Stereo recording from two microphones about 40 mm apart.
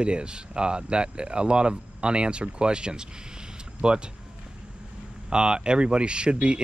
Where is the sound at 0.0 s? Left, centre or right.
Right.